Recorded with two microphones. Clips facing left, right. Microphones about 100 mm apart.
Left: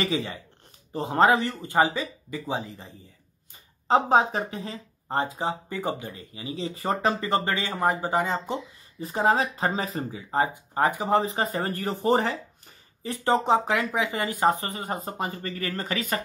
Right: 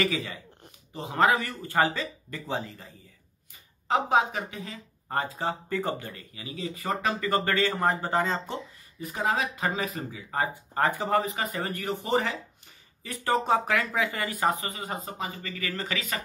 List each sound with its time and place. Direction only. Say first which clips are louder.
0.0 s speech: left 1 dB; 30° left (ahead or behind)
3.8 s speech: left 4 dB; 35° left (ahead or behind); by 8.5 s 15° left (ahead or behind)
9.0 s speech: left 5 dB; 35° left (ahead or behind)
13.0 s speech: left 3 dB; 25° left (ahead or behind)
14.6 s speech: left 3 dB; 40° left (ahead or behind)